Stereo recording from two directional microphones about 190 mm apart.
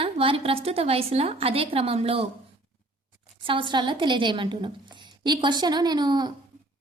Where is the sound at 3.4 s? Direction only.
25° right (ahead or behind).